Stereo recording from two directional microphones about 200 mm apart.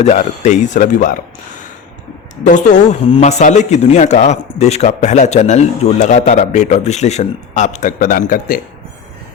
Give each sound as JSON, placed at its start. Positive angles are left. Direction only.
{"t": 0.0, "sound": "a man's voice", "side_deg": 35}
{"t": 2.5, "sound": "a man's voice", "side_deg": 40}